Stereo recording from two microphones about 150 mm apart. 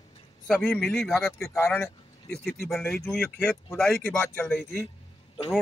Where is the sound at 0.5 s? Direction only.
5° left (ahead or behind).